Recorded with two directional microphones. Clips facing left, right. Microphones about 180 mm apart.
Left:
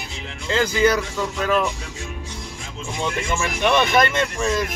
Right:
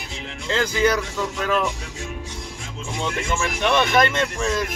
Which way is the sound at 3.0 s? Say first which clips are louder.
Left 1 dB; 10° left (ahead or behind).